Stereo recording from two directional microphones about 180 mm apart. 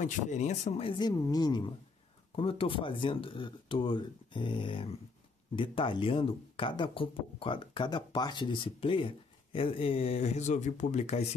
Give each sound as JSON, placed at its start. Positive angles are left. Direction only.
{"t": 0.0, "sound": "speech", "side_deg": 40}